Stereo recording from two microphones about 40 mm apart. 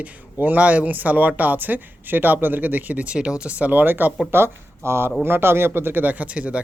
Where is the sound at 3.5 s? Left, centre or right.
Right.